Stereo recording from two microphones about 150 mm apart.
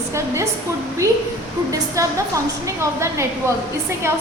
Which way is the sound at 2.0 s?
20° right (ahead or behind).